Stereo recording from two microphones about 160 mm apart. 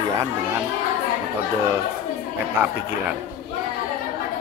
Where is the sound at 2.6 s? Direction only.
10° right (ahead or behind).